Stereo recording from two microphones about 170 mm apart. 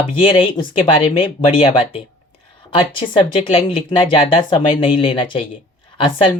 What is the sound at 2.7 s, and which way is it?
Speech, 30° left (ahead or behind).